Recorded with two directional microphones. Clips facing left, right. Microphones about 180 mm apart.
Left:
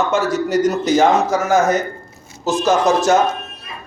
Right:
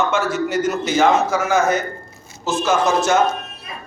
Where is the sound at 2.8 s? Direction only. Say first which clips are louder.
Left 3 dB; 35° left (ahead or behind).